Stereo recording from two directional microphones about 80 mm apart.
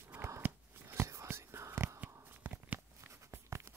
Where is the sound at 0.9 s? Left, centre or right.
Right.